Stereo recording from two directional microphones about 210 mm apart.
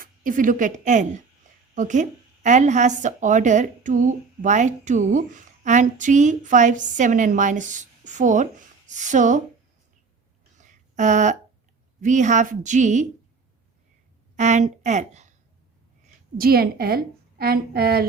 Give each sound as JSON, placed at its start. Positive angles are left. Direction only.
{"t": 0.0, "sound": "a woman's voice", "side_deg": -40}
{"t": 10.6, "sound": "a sound", "side_deg": -35}
{"t": 11.9, "sound": "a woman's voice", "side_deg": -35}
{"t": 14.3, "sound": "a woman's voice", "side_deg": -35}
{"t": 16.4, "sound": "a woman's voice", "side_deg": -45}